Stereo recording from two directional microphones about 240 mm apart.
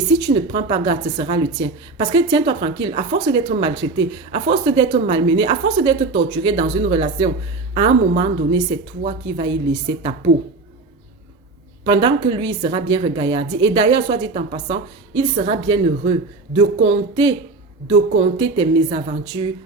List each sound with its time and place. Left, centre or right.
0.5 s a woman's voice: centre
11.9 s a woman's voice: right